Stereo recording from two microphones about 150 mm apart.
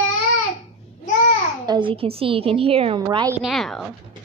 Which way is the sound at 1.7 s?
35° right (ahead or behind).